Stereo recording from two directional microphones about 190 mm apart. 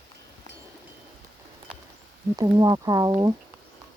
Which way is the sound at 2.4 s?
20° right (ahead or behind).